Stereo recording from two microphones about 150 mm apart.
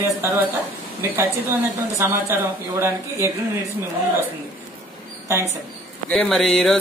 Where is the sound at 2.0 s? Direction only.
15° right (ahead or behind).